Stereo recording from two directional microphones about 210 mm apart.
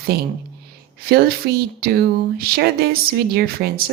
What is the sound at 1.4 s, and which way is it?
A woman's voice, 50° right (ahead or behind).